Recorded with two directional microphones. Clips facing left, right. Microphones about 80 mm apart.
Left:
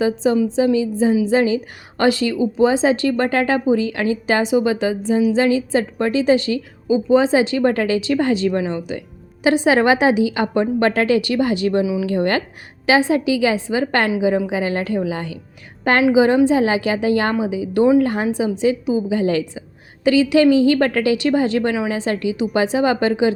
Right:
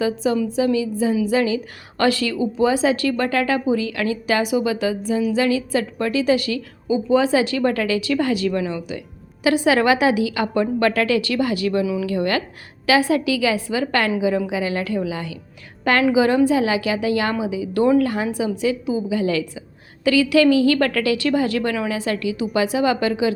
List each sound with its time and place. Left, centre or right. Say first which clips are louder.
0.0 s a woman's voice: left 3 dB; left